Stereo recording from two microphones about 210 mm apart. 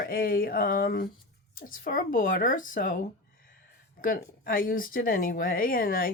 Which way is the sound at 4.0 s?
45° left (ahead or behind).